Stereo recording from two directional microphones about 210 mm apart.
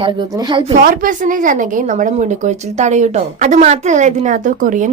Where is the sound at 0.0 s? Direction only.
20° right (ahead or behind).